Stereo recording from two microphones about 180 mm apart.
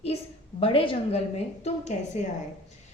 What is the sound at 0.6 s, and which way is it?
A woman's voice, 30° left (ahead or behind).